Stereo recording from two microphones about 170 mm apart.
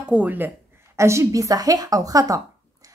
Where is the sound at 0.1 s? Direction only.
10° right (ahead or behind).